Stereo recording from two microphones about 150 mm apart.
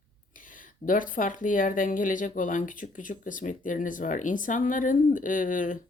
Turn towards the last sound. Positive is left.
turn(degrees=60)  # may be behind; listen again after turning